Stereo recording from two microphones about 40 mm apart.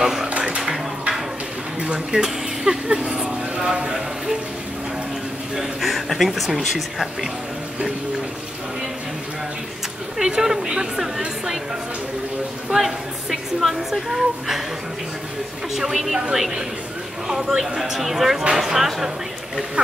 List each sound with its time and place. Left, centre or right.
0.0 s a sound: centre
1.8 s a woman's voice: right
5.6 s speech: centre
10.1 s a woman's voice: centre
12.6 s a woman's voice: centre
15.7 s a woman's voice: centre